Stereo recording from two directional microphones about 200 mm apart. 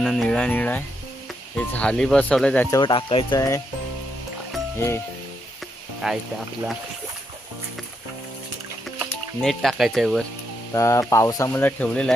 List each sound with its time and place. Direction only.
0.0 s speech: centre (ahead or behind)
2.6 s speech: 20° left (ahead or behind)
6.0 s speech: centre (ahead or behind)
9.0 s speech: centre (ahead or behind)
10.8 s speech: 15° left (ahead or behind)